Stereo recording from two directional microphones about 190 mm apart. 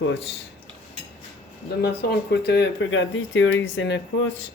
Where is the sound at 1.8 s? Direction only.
60° left (ahead or behind).